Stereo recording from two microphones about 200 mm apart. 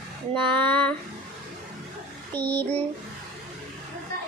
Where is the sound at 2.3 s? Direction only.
10° left (ahead or behind).